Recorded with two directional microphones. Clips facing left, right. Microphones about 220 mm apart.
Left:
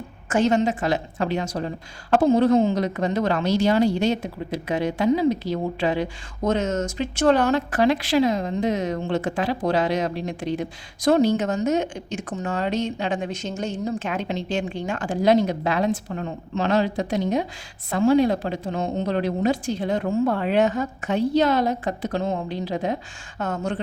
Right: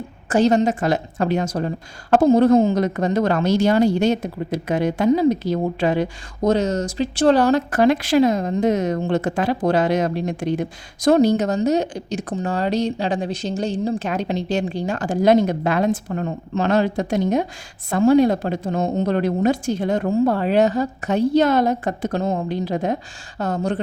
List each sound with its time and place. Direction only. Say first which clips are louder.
0.3 s a woman's voice: right 4 dB; 35° right (ahead or behind)